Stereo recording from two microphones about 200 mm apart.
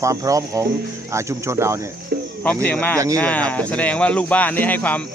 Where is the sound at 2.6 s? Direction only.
5° left (ahead or behind).